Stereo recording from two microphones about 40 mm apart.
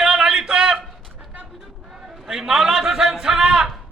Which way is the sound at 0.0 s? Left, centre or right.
Centre.